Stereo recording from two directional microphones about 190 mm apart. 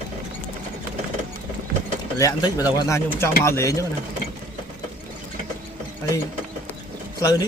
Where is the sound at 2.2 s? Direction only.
20° left (ahead or behind).